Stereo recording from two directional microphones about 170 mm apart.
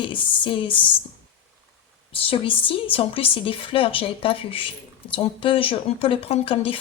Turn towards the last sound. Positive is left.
turn(degrees=35)  # may be behind; listen again after turning